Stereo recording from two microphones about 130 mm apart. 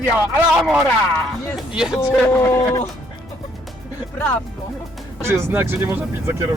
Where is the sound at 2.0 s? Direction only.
20° left (ahead or behind).